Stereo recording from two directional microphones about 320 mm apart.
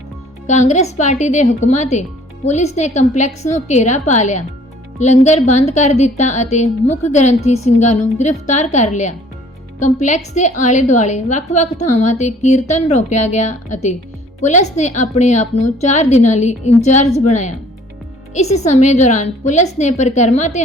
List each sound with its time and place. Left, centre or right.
0.4 s a woman's voice: left